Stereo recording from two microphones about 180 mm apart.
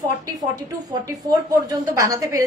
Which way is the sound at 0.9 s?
20° right (ahead or behind).